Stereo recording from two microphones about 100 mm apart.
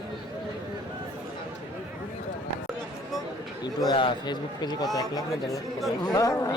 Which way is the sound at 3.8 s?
50° left (ahead or behind).